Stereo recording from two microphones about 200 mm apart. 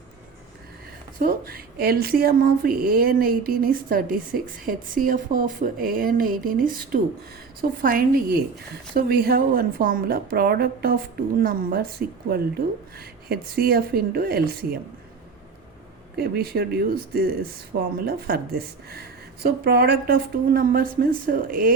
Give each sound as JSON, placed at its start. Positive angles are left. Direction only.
{"t": 1.2, "sound": "speech", "side_deg": -50}
{"t": 9.0, "sound": "speech", "side_deg": -50}
{"t": 16.1, "sound": "speech", "side_deg": -50}